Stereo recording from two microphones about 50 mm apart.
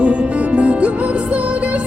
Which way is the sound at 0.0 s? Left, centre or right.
Right.